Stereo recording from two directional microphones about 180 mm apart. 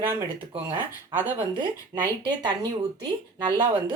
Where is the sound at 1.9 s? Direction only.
20° right (ahead or behind).